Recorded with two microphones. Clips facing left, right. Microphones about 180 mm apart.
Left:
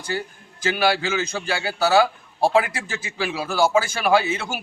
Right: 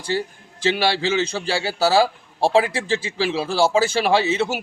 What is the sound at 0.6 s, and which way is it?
A man's voice, 30° right (ahead or behind).